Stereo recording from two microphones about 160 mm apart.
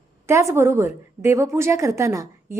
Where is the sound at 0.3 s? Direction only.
15° right (ahead or behind).